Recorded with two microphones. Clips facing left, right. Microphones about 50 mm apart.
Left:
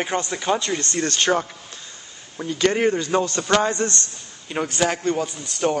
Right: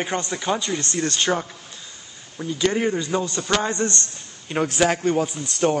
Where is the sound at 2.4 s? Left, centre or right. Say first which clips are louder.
Left 2 dB; left.